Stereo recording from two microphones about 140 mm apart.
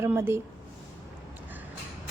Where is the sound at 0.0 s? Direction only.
15° right (ahead or behind).